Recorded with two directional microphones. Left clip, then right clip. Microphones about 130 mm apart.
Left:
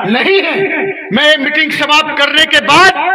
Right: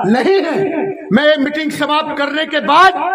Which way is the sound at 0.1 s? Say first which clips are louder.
Left 4 dB; 65° right (ahead or behind).